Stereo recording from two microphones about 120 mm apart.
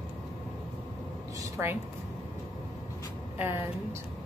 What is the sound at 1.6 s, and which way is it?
Speech, 20° right (ahead or behind).